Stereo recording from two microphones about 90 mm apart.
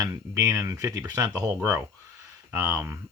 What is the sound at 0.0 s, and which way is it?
Speech, 35° right (ahead or behind).